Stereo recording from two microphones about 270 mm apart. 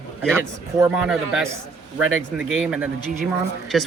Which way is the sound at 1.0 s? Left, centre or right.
Centre.